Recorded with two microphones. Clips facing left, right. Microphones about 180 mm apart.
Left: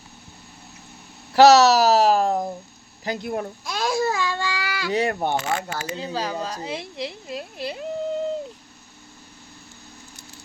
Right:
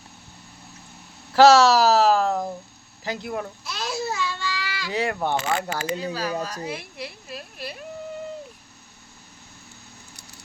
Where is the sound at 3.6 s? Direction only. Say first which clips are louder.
Left 9 dB; 50° left (ahead or behind).